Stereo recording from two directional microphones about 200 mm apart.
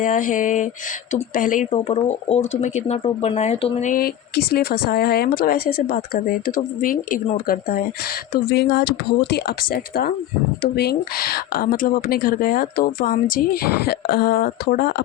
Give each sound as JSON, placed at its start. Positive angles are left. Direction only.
{"t": 0.0, "sound": "speech", "side_deg": 40}